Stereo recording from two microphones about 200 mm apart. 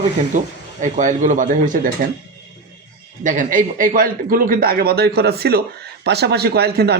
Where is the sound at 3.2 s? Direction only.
40° right (ahead or behind).